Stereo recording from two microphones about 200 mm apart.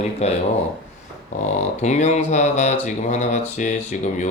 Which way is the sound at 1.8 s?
35° left (ahead or behind).